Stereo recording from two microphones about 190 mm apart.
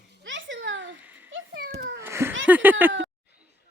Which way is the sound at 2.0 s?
10° right (ahead or behind).